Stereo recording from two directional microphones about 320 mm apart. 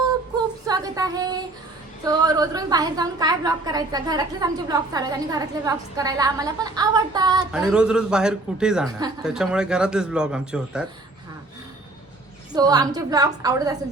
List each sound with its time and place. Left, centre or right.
0.7 s a sound: centre
2.0 s a woman's voice: centre
12.5 s a woman's voice: centre